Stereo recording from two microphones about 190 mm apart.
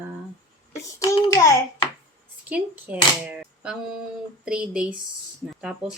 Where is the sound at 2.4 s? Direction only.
5° right (ahead or behind).